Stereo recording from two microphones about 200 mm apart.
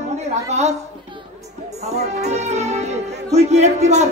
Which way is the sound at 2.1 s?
35° right (ahead or behind).